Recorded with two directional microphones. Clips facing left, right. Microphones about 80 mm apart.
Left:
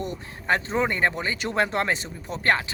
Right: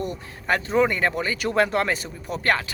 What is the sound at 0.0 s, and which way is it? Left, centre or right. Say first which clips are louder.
Speech: right 2 dB; left.